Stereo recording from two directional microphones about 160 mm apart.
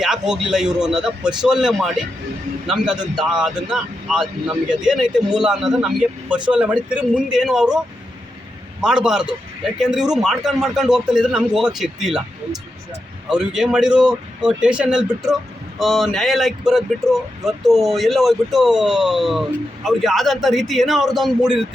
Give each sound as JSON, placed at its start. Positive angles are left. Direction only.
{"t": 0.0, "sound": "speech", "side_deg": -5}
{"t": 8.8, "sound": "speech", "side_deg": -5}